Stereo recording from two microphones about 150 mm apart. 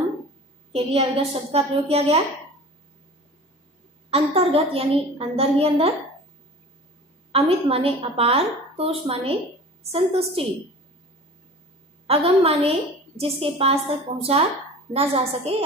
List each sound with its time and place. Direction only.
0.7 s a woman's voice: 40° right (ahead or behind)
4.1 s a woman's voice: 40° right (ahead or behind)
7.3 s a woman's voice: 40° right (ahead or behind)
12.1 s a woman's voice: 40° right (ahead or behind)